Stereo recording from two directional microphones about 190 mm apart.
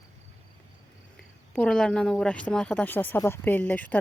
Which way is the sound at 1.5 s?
5° left (ahead or behind).